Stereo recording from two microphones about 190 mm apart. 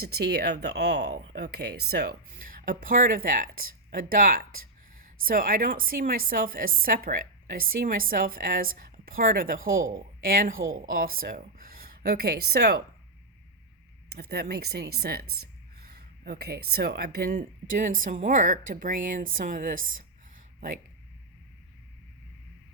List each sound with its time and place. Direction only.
0.0 s a woman's voice: 55° right (ahead or behind)
14.1 s speech: 55° right (ahead or behind)